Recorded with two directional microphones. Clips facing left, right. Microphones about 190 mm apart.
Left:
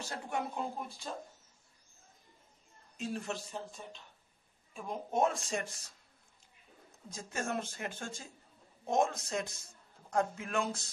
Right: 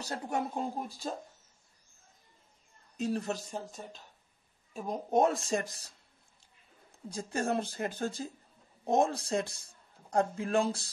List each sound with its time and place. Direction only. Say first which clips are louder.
0.0 s speech: right 4 dB; 40° right (ahead or behind)
3.0 s speech: right 5 dB; 40° right (ahead or behind)
7.1 s speech: right 6 dB; 35° right (ahead or behind)